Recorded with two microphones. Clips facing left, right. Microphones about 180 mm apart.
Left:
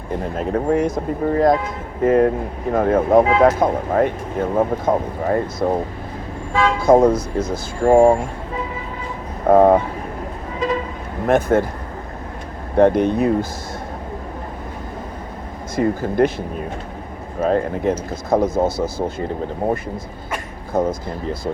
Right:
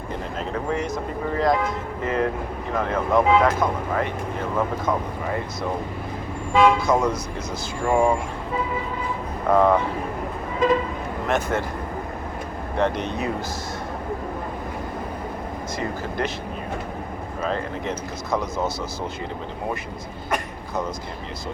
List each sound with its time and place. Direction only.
0.3 s speech: 50° left (ahead or behind)
6.7 s speech: 55° left (ahead or behind)
9.5 s speech: 50° left (ahead or behind)
11.3 s speech: 50° left (ahead or behind)
12.7 s speech: 50° left (ahead or behind)
15.7 s speech: 50° left (ahead or behind)
17.4 s speech: 50° left (ahead or behind)